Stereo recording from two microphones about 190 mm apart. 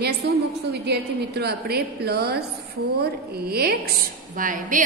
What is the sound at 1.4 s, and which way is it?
A woman's voice, 55° right (ahead or behind).